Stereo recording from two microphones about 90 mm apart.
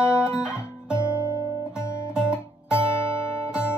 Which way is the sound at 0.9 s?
30° left (ahead or behind).